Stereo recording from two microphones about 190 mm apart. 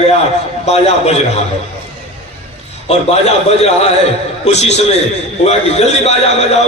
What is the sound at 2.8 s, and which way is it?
A man's voice, 35° left (ahead or behind).